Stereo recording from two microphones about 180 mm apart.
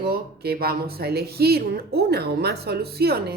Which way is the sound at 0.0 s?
60° right (ahead or behind).